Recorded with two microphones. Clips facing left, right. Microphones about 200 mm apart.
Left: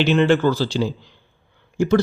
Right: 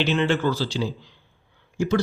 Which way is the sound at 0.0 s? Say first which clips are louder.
Left 6 dB; 50° left (ahead or behind).